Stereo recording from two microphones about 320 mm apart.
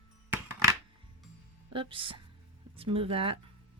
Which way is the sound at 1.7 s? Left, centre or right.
Centre.